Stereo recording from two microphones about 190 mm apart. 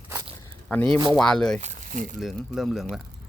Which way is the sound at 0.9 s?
25° right (ahead or behind).